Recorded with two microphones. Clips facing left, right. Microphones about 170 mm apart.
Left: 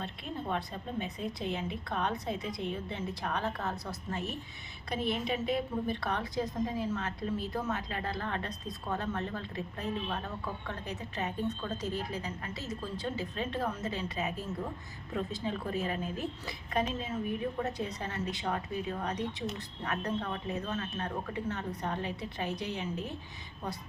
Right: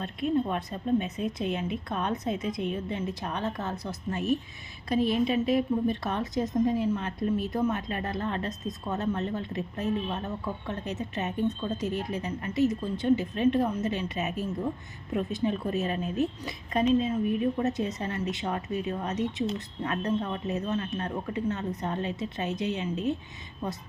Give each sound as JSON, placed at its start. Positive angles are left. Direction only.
{"t": 0.2, "sound": "a woman's voice", "side_deg": -20}